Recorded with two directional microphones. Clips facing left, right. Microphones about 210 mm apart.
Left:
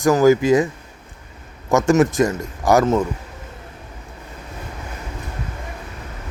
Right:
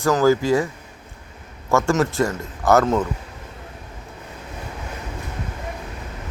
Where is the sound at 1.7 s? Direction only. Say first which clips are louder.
Left 4 dB; 15° left (ahead or behind).